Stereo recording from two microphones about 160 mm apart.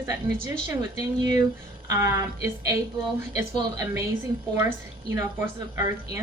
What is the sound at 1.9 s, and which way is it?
A woman's voice, 20° right (ahead or behind).